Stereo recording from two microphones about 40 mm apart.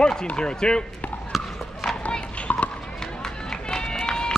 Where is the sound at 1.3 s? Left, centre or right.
Centre.